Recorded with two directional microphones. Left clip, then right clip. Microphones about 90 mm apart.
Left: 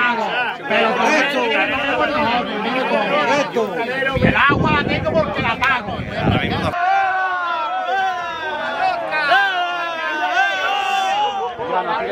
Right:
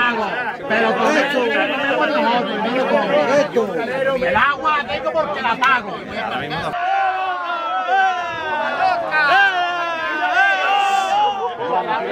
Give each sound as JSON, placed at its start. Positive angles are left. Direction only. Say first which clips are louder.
{"t": 0.7, "sound": "chatter", "louder": "left 1 dB", "side_deg": 25}
{"t": 2.0, "sound": "a man's voice", "louder": "right 2 dB", "side_deg": 5}
{"t": 3.3, "sound": "chatter", "louder": "right 1 dB", "side_deg": 25}
{"t": 4.3, "sound": "speech", "louder": "left 2 dB", "side_deg": 20}
{"t": 8.8, "sound": "a sound", "louder": "right 2 dB", "side_deg": 0}
{"t": 10.3, "sound": "a sound", "louder": "right 4 dB", "side_deg": 15}